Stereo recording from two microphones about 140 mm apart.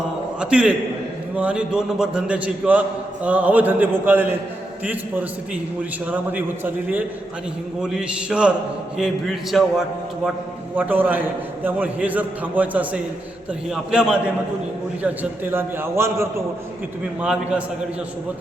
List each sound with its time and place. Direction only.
0.3 s a man's voice: 5° right (ahead or behind)
10.8 s a man's voice: 15° right (ahead or behind)
17.2 s a man's voice: 10° right (ahead or behind)